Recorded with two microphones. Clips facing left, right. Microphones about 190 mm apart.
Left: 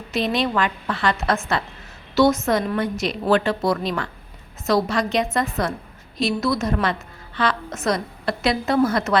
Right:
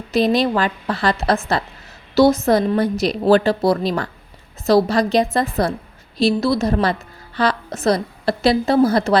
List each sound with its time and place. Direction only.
0.1 s a woman's voice: 35° right (ahead or behind)